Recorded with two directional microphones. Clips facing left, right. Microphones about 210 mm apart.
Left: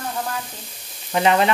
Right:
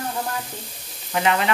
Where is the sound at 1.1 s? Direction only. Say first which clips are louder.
Left 4 dB; 30° left (ahead or behind).